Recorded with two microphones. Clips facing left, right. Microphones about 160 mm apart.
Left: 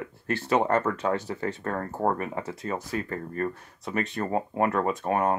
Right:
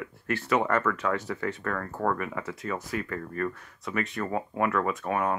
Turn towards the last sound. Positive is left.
turn(degrees=35)  # may be behind; listen again after turning